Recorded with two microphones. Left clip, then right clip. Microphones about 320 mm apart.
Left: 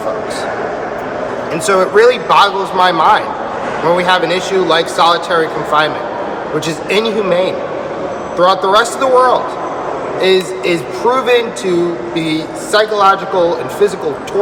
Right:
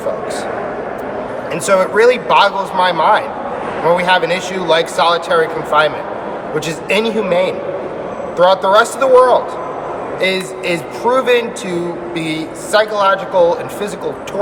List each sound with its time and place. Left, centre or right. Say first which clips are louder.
1.6 s speech: left 2 dB; centre
6.9 s speech: left 1 dB; centre